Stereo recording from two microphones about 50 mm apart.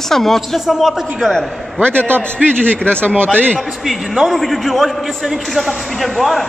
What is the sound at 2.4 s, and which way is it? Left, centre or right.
Speech, centre.